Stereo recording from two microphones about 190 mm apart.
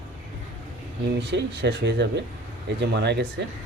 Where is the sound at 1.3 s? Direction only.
65° right (ahead or behind).